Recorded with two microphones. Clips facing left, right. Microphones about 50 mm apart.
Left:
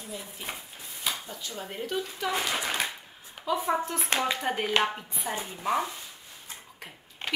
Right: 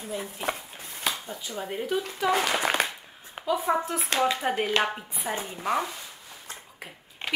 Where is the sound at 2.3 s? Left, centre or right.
Right.